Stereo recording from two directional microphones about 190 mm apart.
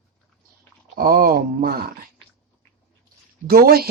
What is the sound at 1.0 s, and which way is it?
Speech, 50° right (ahead or behind).